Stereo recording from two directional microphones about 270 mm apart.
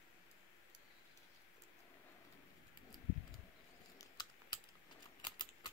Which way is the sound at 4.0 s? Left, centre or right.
Centre.